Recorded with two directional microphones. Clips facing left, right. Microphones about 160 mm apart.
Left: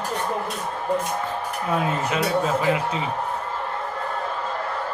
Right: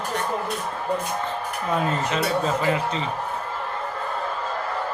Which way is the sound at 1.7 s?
10° left (ahead or behind).